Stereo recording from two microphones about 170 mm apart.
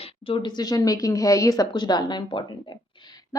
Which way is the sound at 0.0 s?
30° left (ahead or behind).